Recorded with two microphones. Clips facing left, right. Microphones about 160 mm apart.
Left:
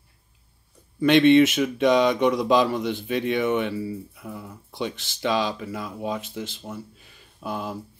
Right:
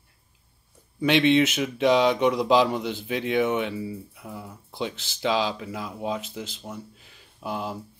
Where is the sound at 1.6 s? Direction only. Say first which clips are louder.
Left 1 dB; 10° right (ahead or behind).